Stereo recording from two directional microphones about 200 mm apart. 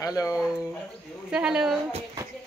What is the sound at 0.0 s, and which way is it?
Speech, 20° left (ahead or behind).